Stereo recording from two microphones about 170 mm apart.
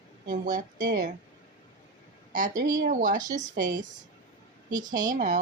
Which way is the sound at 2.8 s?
50° right (ahead or behind).